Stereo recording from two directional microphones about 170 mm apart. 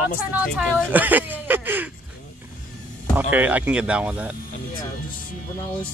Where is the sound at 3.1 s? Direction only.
10° right (ahead or behind).